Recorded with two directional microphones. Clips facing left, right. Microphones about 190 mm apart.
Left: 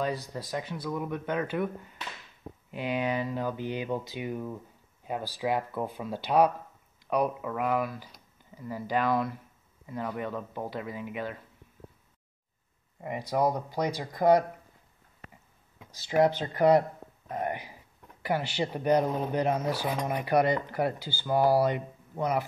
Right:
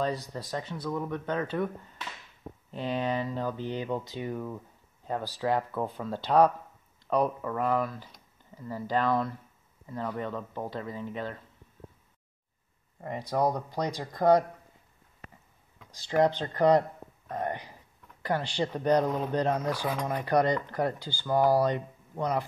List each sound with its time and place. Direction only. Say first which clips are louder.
0.4 s speech: even; 5° left (ahead or behind)
13.3 s speech: even; 5° left (ahead or behind)
16.3 s speech: left 1 dB; 10° left (ahead or behind)